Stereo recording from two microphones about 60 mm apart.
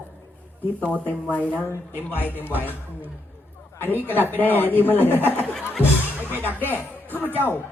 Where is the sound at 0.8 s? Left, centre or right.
Left.